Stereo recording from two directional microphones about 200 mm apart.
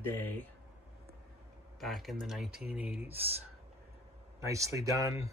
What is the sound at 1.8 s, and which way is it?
Speech, centre (ahead or behind).